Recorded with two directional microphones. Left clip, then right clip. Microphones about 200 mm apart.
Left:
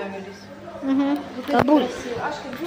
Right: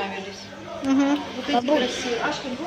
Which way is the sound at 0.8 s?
5° left (ahead or behind).